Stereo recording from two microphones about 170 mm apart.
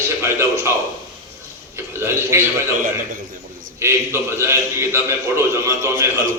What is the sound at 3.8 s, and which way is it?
A man's voice, 15° right (ahead or behind).